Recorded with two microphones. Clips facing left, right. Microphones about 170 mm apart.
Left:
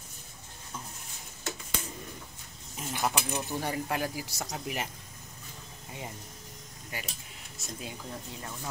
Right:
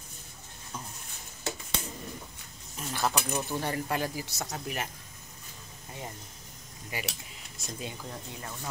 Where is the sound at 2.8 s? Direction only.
15° left (ahead or behind).